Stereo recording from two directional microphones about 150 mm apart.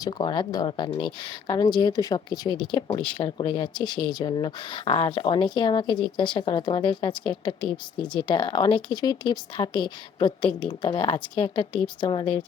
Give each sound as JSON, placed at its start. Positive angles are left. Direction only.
{"t": 0.0, "sound": "speech", "side_deg": 30}